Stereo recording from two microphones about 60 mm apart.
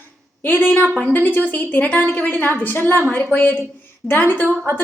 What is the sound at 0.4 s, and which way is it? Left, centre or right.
A woman's voice, left.